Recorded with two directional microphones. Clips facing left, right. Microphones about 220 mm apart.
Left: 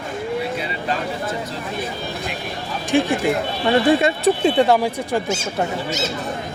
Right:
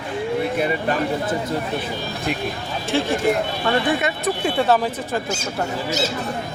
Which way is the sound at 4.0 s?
30° left (ahead or behind).